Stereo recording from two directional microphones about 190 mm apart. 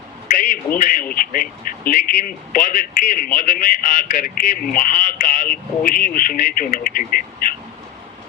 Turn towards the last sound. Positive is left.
turn(degrees=45)  # may be behind; listen again after turning